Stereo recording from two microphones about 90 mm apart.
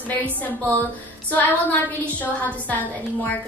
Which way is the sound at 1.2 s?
20° left (ahead or behind).